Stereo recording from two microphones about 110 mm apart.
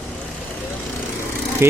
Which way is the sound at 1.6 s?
25° right (ahead or behind).